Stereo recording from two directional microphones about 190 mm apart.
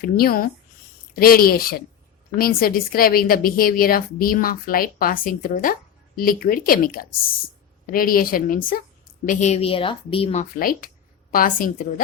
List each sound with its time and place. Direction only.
0.0 s a woman's voice: 50° left (ahead or behind); by 10.4 s 30° left (ahead or behind)
10.6 s a woman's voice: 50° left (ahead or behind)